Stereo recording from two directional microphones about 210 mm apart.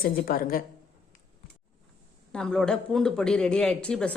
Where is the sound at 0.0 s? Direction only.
45° left (ahead or behind).